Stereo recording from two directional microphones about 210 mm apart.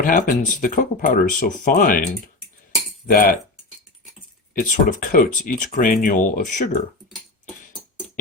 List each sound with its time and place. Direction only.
0.0 s speech: 40° left (ahead or behind)
3.1 s cutlery: 45° left (ahead or behind)
4.5 s speech: 40° left (ahead or behind)